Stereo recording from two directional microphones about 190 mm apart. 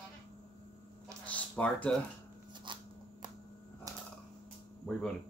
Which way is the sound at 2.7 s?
25° right (ahead or behind).